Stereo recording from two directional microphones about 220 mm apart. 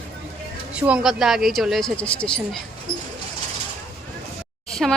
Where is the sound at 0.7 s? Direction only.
5° right (ahead or behind).